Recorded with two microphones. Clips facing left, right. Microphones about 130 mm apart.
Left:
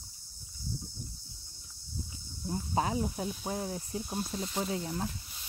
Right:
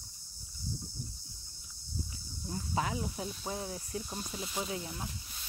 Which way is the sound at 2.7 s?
35° left (ahead or behind).